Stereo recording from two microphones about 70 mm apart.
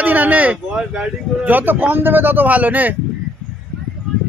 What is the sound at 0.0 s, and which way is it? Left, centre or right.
Speech, right.